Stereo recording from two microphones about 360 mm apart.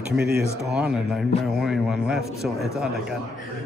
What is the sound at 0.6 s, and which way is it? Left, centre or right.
A man's voice, centre.